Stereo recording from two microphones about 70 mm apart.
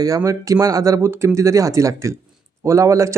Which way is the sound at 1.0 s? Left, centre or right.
Right.